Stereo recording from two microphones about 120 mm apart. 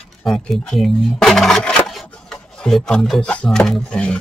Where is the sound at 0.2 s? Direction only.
5° left (ahead or behind).